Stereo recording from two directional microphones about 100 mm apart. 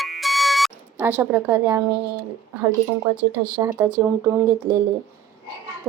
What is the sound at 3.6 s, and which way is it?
Speech, 25° right (ahead or behind).